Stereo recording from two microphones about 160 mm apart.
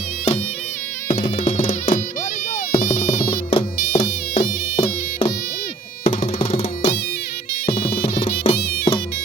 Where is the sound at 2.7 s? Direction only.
65° left (ahead or behind).